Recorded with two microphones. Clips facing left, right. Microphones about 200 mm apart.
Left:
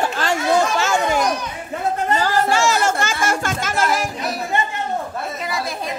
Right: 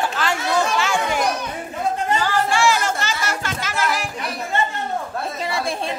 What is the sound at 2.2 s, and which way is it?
Music, 40° left (ahead or behind).